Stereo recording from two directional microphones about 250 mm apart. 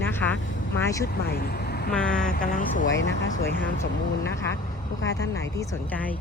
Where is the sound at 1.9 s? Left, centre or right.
Centre.